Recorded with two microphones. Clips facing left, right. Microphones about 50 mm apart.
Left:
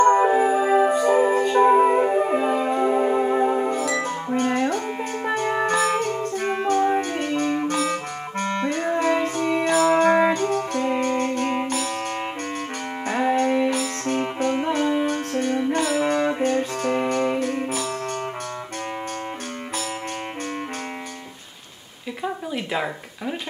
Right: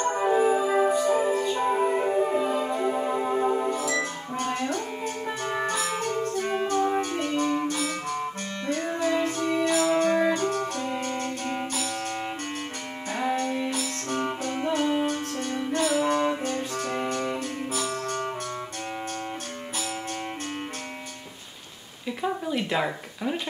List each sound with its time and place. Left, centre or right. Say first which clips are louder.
0.0 s music: left 6 dB; left
7.6 s clarinet: left 5 dB; left
9.0 s music: left 2 dB; left
9.8 s music: left 7 dB; left
13.4 s music: left 7 dB; left
16.0 s brass instrument: left 3 dB; left
22.2 s a sound: even; centre